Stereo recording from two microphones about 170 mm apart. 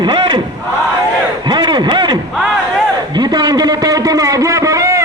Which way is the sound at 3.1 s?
25° right (ahead or behind).